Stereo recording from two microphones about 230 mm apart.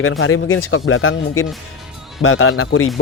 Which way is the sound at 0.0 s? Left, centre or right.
Left.